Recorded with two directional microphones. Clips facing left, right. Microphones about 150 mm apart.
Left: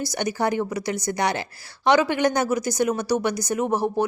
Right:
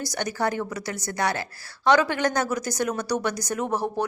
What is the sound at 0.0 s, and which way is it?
A woman's voice, 10° left (ahead or behind).